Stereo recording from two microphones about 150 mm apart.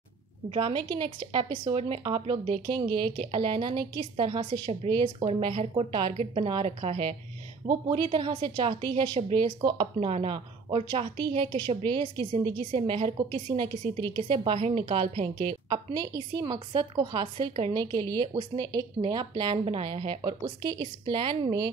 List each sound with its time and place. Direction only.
0.5 s a woman's voice: 40° right (ahead or behind)
9.9 s a woman's voice: 40° right (ahead or behind)